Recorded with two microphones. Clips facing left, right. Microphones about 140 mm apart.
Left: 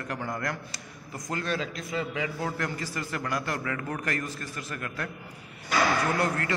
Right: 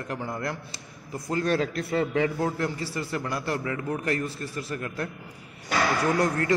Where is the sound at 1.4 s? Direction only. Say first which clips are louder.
Right 8 dB; 50° right (ahead or behind).